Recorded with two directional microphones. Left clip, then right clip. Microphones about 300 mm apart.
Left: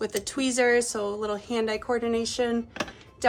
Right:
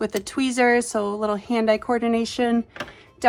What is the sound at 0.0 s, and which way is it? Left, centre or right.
A woman's voice, centre.